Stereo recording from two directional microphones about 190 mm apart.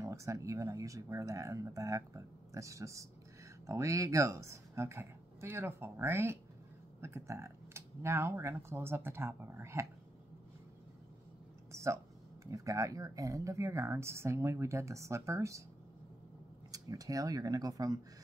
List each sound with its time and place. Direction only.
0.0 s speech: 15° right (ahead or behind)
11.7 s a sound: 15° right (ahead or behind)
12.4 s speech: 15° right (ahead or behind)
16.7 s speech: 20° right (ahead or behind)